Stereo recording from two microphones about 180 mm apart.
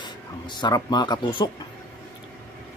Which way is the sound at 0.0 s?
25° left (ahead or behind).